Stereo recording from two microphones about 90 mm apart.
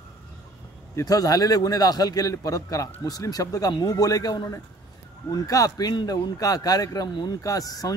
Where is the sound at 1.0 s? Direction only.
40° left (ahead or behind).